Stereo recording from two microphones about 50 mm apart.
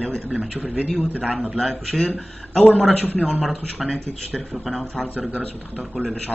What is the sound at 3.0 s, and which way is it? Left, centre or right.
Speech, left.